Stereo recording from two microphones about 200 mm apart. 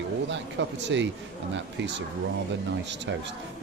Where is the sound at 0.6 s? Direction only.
60° right (ahead or behind).